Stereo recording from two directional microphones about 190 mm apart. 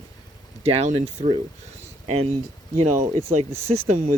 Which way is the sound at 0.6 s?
35° right (ahead or behind).